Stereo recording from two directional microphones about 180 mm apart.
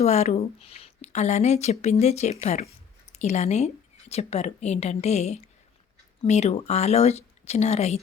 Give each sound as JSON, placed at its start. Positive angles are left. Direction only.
{"t": 0.0, "sound": "speech", "side_deg": 35}